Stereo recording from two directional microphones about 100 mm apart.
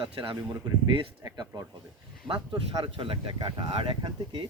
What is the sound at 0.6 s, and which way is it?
Speech, 45° right (ahead or behind).